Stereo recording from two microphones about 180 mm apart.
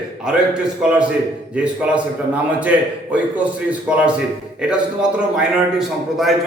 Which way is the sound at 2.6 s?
10° right (ahead or behind).